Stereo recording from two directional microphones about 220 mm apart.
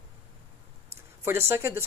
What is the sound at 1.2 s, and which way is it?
Speech, 10° right (ahead or behind).